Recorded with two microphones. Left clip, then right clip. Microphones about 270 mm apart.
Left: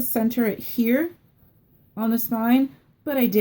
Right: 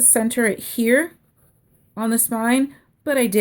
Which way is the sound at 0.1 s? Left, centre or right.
Right.